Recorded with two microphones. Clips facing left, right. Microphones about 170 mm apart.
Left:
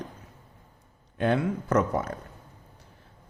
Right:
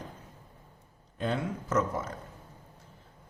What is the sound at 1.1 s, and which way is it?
Speech, 65° left (ahead or behind).